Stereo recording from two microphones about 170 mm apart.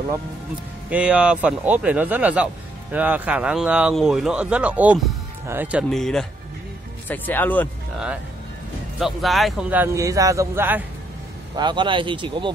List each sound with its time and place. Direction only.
0.8 s speech: 5° right (ahead or behind); by 7.7 s 10° left (ahead or behind)
9.0 s speech: centre (ahead or behind)
11.5 s speech: 25° right (ahead or behind)